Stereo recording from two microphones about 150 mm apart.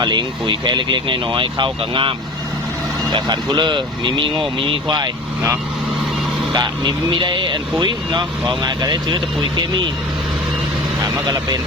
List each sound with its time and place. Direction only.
0.0 s speech: 30° right (ahead or behind)
11.0 s speech: 25° right (ahead or behind)